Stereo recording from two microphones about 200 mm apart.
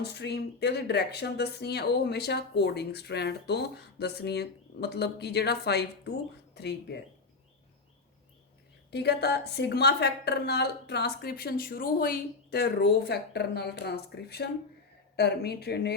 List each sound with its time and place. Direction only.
0.0 s speech: 55° left (ahead or behind)
8.9 s speech: 55° left (ahead or behind)